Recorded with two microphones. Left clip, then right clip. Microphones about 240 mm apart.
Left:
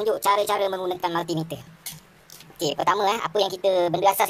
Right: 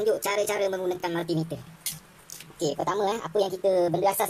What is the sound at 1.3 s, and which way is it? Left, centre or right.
Speech, left.